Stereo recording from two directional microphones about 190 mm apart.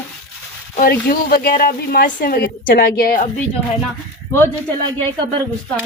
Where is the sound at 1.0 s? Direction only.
50° left (ahead or behind).